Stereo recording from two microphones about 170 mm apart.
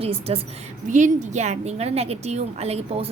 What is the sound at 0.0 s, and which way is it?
Speech, 35° right (ahead or behind).